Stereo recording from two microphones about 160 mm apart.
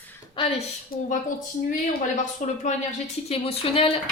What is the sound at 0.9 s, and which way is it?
Speech, 65° left (ahead or behind).